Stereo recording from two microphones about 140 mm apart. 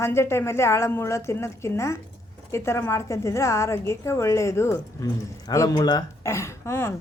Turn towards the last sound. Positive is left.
turn(degrees=20)  # may be behind; listen again after turning